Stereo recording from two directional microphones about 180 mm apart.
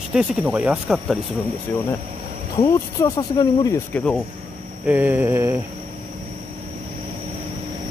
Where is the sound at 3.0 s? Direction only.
20° left (ahead or behind).